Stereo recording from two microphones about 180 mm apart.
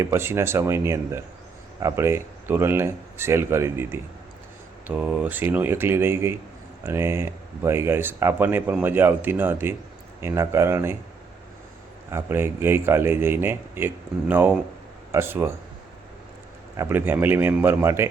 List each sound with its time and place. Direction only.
0.0 s speech: 15° right (ahead or behind)
12.1 s speech: 10° right (ahead or behind)
16.7 s speech: 15° right (ahead or behind)